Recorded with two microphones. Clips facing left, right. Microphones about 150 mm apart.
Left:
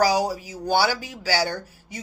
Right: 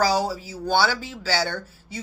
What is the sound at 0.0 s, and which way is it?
Speech, 10° left (ahead or behind).